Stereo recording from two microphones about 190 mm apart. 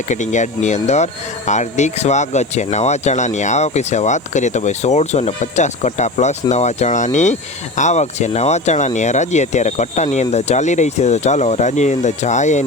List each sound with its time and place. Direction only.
0.1 s speech: 40° left (ahead or behind)